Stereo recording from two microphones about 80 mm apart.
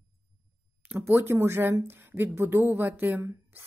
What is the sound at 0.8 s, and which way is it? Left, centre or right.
A woman's voice, right.